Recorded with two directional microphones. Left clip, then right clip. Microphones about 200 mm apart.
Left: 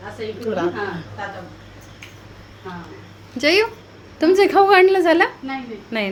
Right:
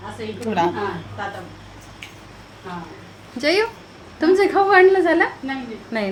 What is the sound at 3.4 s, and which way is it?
A woman's voice, 15° left (ahead or behind).